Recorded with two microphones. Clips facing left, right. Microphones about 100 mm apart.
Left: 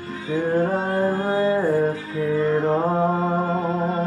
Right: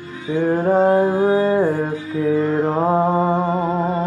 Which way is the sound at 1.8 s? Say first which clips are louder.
Right 2 dB; 25° right (ahead or behind).